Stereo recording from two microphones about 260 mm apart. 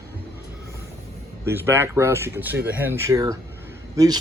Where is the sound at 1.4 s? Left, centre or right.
Centre.